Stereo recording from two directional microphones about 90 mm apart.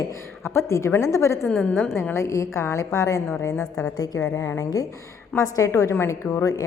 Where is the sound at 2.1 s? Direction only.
35° left (ahead or behind).